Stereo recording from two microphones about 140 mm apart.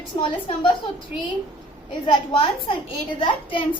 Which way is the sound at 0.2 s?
35° left (ahead or behind).